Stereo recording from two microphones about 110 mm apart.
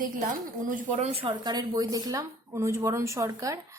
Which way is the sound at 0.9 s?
75° right (ahead or behind).